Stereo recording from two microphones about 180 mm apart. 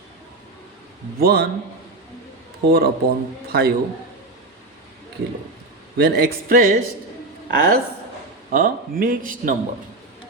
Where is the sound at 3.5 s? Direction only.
60° right (ahead or behind).